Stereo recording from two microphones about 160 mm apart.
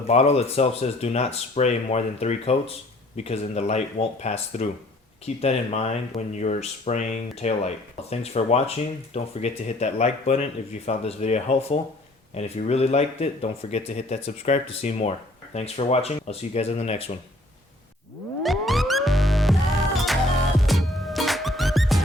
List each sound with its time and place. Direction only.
0.1 s speech: 40° left (ahead or behind)
18.4 s music: centre (ahead or behind)
20.6 s music: centre (ahead or behind)